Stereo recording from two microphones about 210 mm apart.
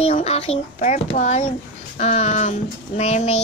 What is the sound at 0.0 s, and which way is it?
A child's voice, 30° left (ahead or behind).